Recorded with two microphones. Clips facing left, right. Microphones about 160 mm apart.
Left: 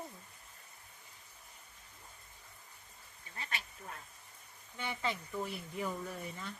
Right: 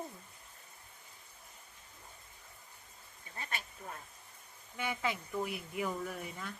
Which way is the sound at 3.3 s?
45° right (ahead or behind).